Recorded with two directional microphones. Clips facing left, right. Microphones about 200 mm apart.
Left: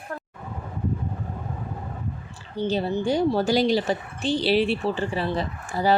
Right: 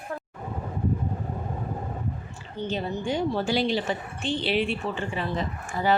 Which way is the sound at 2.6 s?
35° left (ahead or behind).